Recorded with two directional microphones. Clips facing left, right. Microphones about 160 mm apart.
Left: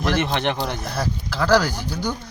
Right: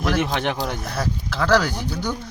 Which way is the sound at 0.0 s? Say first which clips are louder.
Even; centre (ahead or behind).